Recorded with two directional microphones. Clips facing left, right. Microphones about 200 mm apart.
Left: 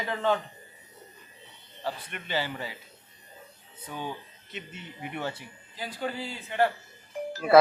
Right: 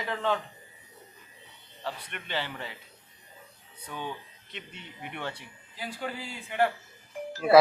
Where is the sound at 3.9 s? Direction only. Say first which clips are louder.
Left 1 dB; 40° left (ahead or behind).